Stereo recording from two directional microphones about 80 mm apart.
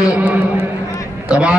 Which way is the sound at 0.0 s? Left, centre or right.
Centre.